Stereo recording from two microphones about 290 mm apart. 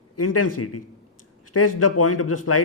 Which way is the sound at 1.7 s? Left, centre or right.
Left.